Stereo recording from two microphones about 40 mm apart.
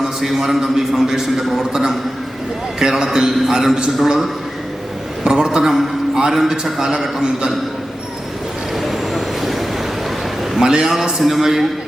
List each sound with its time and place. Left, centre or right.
0.0 s a man's voice: centre
5.2 s a sound: centre
6.4 s a man's voice: centre
8.7 s vehicle: centre
10.6 s a man's voice: centre